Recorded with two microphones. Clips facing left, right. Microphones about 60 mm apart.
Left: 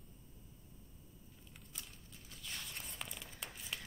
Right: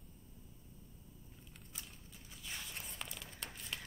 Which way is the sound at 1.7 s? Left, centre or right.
Centre.